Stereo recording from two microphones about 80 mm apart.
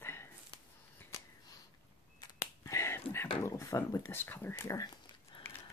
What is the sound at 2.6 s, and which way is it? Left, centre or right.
Whispering, left.